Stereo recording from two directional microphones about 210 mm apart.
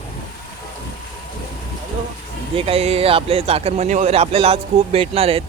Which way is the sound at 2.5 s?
25° right (ahead or behind).